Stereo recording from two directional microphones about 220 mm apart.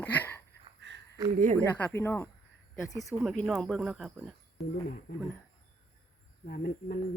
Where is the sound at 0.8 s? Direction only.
55° right (ahead or behind).